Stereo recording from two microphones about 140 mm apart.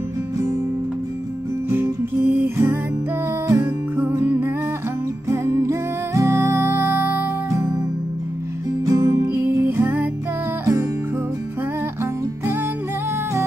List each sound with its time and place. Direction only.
1.7 s music: 15° right (ahead or behind)
8.8 s music: 25° right (ahead or behind)